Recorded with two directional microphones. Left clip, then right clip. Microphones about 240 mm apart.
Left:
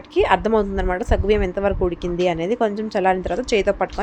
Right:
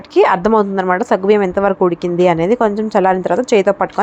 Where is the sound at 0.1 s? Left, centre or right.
Centre.